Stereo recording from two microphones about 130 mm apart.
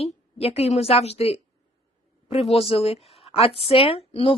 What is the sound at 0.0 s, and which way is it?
A woman's voice, 50° left (ahead or behind).